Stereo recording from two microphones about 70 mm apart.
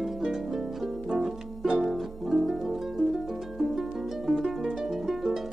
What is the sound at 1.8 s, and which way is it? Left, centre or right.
Music, centre.